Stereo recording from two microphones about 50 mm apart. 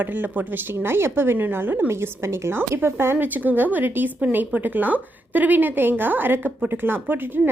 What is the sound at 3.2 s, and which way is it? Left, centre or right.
Speech, right.